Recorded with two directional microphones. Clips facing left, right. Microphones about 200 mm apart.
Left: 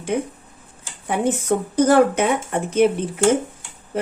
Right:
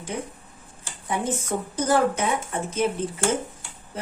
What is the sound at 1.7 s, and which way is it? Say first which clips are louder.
Speech: left 7 dB; 65° left (ahead or behind).